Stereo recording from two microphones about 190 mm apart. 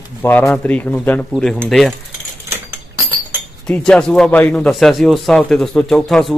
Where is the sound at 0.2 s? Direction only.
10° left (ahead or behind).